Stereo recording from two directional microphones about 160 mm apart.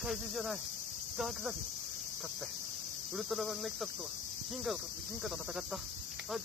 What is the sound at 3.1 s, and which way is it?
Speech, centre (ahead or behind).